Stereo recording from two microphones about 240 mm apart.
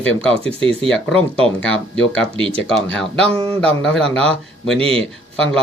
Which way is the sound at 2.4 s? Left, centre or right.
Right.